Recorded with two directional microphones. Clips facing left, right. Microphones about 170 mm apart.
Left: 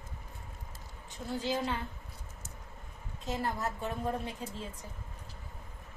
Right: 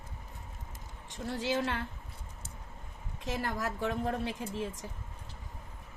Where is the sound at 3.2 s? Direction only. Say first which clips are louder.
Even; 90° right.